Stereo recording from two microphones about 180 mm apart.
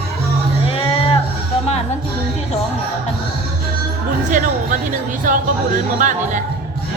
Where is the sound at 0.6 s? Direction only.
30° left (ahead or behind).